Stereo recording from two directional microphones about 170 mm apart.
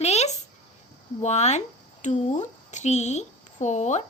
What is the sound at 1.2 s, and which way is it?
A woman's voice, 40° left (ahead or behind).